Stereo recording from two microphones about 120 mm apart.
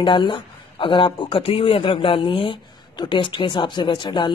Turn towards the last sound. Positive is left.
turn(degrees=40)  # may be behind; listen again after turning